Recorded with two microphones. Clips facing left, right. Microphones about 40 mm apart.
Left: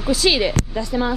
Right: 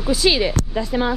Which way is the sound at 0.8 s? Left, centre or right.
Centre.